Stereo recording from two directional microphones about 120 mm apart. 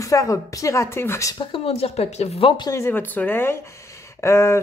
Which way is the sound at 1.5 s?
55° left (ahead or behind).